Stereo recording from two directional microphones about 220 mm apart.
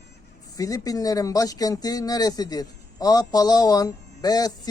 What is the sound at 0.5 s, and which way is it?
Speech, 15° left (ahead or behind).